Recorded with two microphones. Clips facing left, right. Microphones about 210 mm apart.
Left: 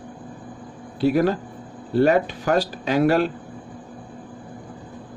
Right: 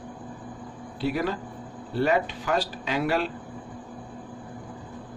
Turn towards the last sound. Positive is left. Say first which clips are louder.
# left 7 dB
turn(degrees=45)  # may be behind; listen again after turning